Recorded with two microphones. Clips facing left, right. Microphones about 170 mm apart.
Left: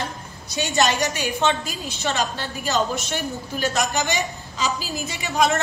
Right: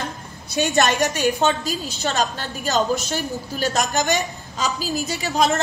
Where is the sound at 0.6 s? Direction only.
50° right (ahead or behind).